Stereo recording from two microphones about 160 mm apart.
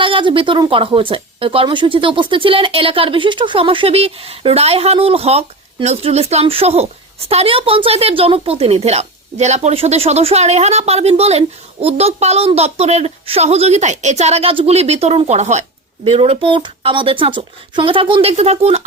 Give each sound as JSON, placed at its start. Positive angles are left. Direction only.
{"t": 0.0, "sound": "speech", "side_deg": -30}